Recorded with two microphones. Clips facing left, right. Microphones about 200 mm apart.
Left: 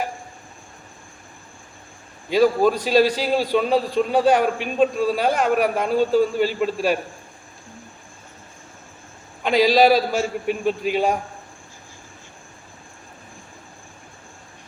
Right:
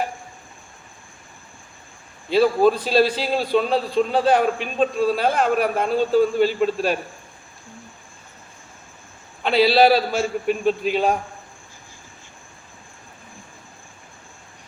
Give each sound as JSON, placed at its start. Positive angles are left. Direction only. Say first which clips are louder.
{"t": 2.3, "sound": "a man's voice", "louder": "even", "side_deg": 10}
{"t": 9.4, "sound": "a man's voice", "louder": "even", "side_deg": 10}